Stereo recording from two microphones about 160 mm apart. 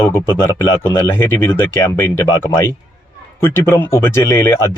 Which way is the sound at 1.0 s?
15° left (ahead or behind).